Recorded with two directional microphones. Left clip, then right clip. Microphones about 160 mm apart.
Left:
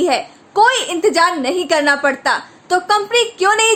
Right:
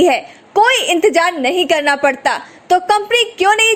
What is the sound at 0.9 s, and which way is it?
A woman's voice, 30° right (ahead or behind).